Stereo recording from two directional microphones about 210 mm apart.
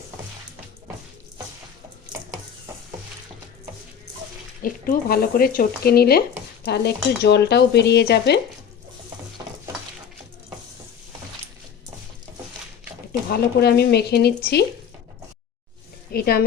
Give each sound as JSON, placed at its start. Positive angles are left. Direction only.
{"t": 4.6, "sound": "speech", "side_deg": 45}
{"t": 13.3, "sound": "speech", "side_deg": 50}
{"t": 16.1, "sound": "speech", "side_deg": 45}